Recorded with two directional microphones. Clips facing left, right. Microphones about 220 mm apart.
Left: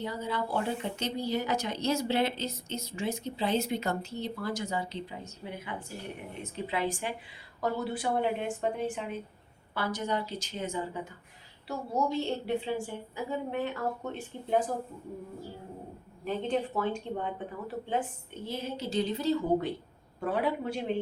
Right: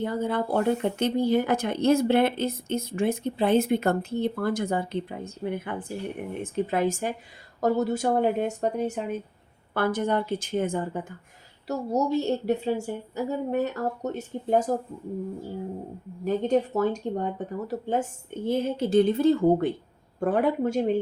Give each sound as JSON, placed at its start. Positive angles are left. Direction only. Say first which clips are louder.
{"t": 0.0, "sound": "a woman's voice", "louder": "right 7 dB", "side_deg": -50}
{"t": 9.7, "sound": "a woman's voice", "louder": "right 7 dB", "side_deg": -55}
{"t": 16.2, "sound": "a woman's voice", "louder": "right 7 dB", "side_deg": -40}